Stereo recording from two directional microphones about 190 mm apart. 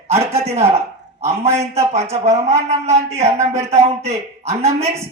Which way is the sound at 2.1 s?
35° right (ahead or behind).